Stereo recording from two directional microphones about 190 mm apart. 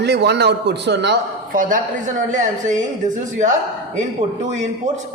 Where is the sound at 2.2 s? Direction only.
40° right (ahead or behind).